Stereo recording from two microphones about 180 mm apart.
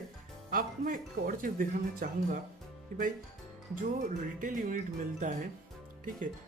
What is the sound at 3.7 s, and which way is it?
Speech, 50° right (ahead or behind).